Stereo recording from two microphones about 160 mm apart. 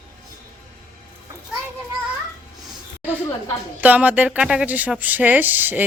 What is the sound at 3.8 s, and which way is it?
Speech, 10° right (ahead or behind).